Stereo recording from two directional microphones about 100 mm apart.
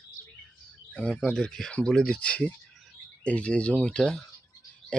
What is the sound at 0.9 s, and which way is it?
Speech, 15° left (ahead or behind).